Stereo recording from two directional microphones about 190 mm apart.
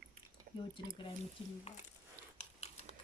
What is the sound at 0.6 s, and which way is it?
Speech, 25° left (ahead or behind).